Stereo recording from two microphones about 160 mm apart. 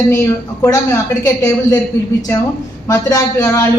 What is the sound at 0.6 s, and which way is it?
A woman's voice, 20° left (ahead or behind).